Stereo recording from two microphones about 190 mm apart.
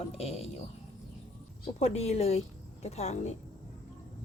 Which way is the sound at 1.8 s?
35° left (ahead or behind).